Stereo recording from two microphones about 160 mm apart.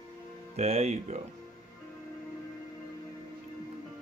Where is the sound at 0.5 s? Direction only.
40° right (ahead or behind).